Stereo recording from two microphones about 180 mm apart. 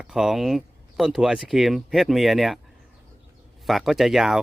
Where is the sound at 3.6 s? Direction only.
Centre (ahead or behind).